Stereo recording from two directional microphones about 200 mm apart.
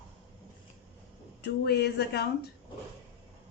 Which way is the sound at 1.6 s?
55° left (ahead or behind).